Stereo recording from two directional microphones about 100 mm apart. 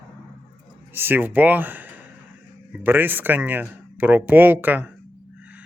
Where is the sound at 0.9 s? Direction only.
20° right (ahead or behind).